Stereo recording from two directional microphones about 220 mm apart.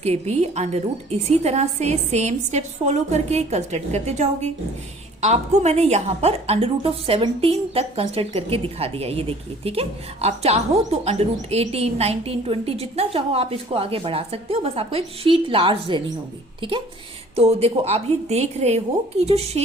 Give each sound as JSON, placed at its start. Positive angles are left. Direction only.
{"t": 0.0, "sound": "a woman's voice", "side_deg": -30}